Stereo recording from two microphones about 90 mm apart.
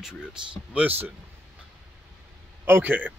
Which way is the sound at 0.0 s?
10° right (ahead or behind).